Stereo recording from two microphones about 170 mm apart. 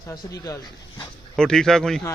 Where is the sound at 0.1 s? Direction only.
20° left (ahead or behind).